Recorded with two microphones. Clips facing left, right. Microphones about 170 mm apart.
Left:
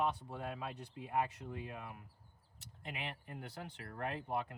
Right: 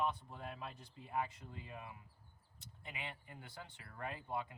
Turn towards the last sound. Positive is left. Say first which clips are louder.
# left 4 dB
turn(degrees=70)  # may be behind; listen again after turning